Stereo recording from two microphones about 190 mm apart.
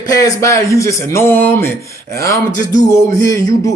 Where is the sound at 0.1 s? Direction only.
15° left (ahead or behind).